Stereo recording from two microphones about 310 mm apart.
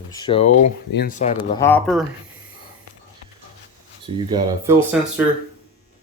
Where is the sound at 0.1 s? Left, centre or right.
Centre.